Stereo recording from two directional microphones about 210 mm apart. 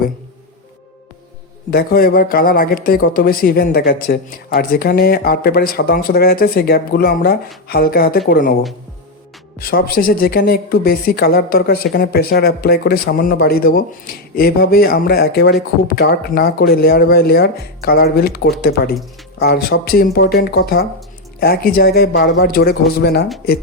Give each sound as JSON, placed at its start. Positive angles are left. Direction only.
{"t": 1.7, "sound": "speech", "side_deg": 45}
{"t": 9.6, "sound": "speech", "side_deg": 45}